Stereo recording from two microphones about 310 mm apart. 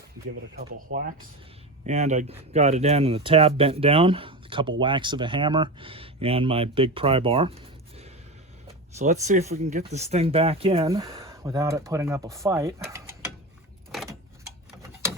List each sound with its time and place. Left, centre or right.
0.8 s speech: right; by 13.0 s centre